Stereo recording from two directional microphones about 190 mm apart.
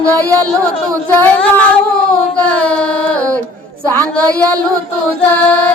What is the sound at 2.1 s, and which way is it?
Carnatic music, 5° left (ahead or behind).